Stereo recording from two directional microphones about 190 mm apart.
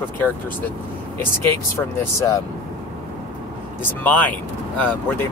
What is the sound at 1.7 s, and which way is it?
Speech, 15° left (ahead or behind).